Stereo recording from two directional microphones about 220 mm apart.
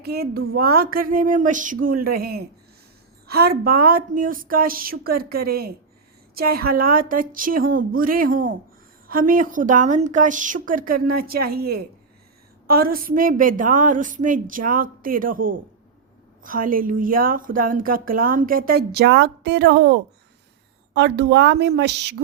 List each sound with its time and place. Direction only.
0.0 s speech: 45° right (ahead or behind)